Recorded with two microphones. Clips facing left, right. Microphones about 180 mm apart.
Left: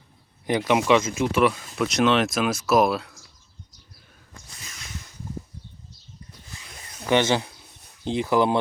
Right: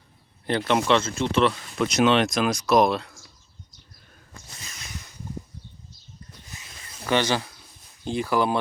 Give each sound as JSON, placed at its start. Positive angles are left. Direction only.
{"t": 0.4, "sound": "speech", "side_deg": 10}
{"t": 6.5, "sound": "a sound", "side_deg": -20}
{"t": 7.0, "sound": "speech", "side_deg": 20}